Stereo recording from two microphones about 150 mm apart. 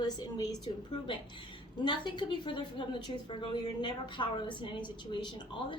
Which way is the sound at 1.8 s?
30° left (ahead or behind).